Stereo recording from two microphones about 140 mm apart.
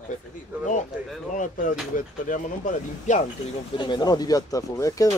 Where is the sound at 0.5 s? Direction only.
10° right (ahead or behind).